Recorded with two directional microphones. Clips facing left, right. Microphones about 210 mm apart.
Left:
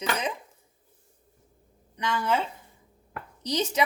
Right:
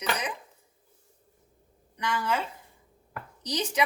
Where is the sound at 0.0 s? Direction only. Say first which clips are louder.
Left 2 dB; 25° left (ahead or behind).